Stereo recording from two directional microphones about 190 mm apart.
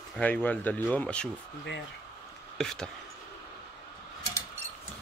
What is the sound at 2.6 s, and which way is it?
Speech, centre (ahead or behind).